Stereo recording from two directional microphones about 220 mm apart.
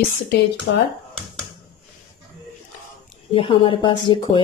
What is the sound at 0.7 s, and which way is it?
Speech, 50° left (ahead or behind).